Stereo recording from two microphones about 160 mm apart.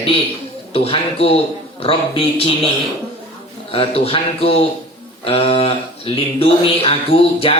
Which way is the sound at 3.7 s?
35° left (ahead or behind).